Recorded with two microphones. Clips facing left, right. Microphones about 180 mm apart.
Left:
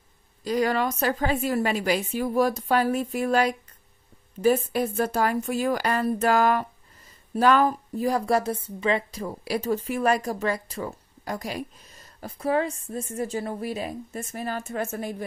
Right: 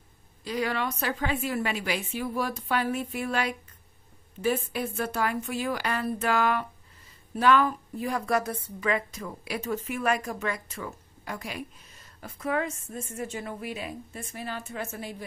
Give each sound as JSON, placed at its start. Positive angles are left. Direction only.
{"t": 0.4, "sound": "speech", "side_deg": 40}